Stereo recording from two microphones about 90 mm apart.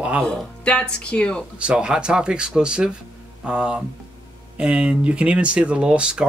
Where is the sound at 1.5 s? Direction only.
10° right (ahead or behind).